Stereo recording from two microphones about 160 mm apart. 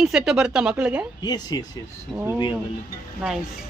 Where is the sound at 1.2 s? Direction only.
25° left (ahead or behind).